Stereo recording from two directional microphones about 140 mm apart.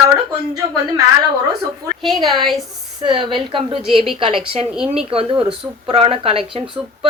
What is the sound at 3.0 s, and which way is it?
A woman's voice, 35° right (ahead or behind).